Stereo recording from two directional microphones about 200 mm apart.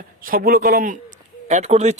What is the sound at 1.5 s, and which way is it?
Speech, 35° right (ahead or behind).